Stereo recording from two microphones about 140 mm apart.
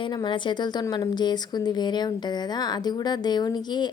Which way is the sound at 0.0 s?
30° left (ahead or behind).